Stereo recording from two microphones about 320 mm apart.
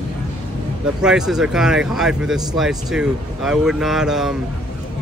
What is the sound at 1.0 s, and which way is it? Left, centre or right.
Speech, centre.